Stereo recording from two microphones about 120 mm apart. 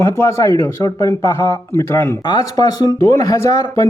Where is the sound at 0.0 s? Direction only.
25° left (ahead or behind).